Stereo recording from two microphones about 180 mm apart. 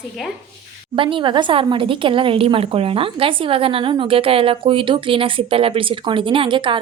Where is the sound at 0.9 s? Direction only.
30° right (ahead or behind).